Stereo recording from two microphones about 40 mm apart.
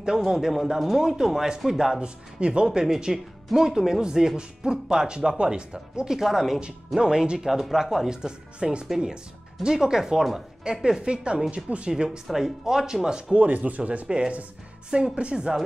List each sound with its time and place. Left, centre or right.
0.2 s speech: centre
2.0 s speech: right
6.1 s speech: centre
7.0 s speech: centre
7.4 s speech: centre; by 11.9 s right
11.9 s speech: right
12.3 s speech: centre
13.5 s speech: right
14.0 s speech: right